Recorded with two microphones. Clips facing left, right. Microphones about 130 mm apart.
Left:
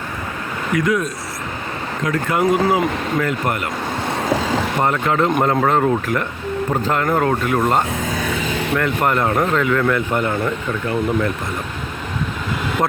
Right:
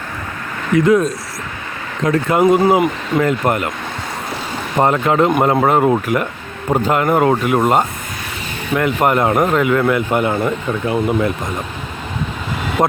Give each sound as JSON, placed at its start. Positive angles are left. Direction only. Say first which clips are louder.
{"t": 0.9, "sound": "speech", "louder": "right 6 dB", "side_deg": -30}
{"t": 4.8, "sound": "speech", "louder": "right 6 dB", "side_deg": -20}